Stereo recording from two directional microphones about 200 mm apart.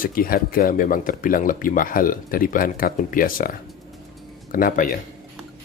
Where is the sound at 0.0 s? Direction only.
45° left (ahead or behind).